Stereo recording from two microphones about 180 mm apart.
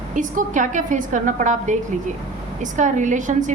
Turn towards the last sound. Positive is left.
turn(degrees=-45)  # may be behind; listen again after turning